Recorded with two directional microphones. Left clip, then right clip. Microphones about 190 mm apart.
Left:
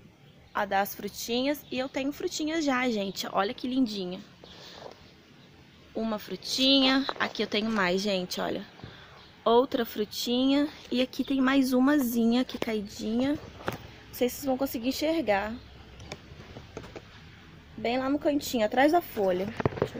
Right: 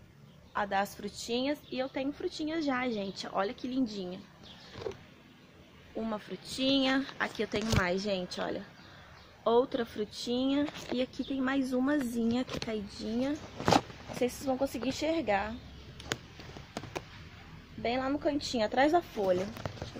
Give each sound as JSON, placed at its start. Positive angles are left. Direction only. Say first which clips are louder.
{"t": 0.5, "sound": "speech", "louder": "left 4 dB", "side_deg": 45}
{"t": 5.9, "sound": "speech", "louder": "left 4 dB", "side_deg": 50}
{"t": 17.8, "sound": "speech", "louder": "left 4 dB", "side_deg": 50}